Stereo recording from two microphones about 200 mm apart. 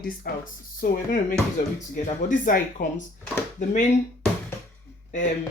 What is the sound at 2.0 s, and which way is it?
Speech, 40° left (ahead or behind).